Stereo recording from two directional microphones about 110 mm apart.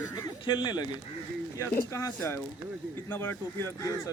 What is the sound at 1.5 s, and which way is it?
Speech, 25° left (ahead or behind).